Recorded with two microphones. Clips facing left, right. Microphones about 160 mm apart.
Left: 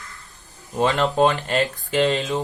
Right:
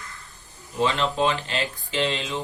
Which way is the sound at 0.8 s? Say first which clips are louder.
Left 4 dB; 40° left (ahead or behind).